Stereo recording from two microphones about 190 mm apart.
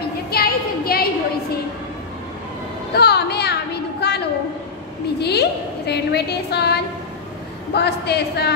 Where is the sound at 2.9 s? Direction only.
60° left (ahead or behind).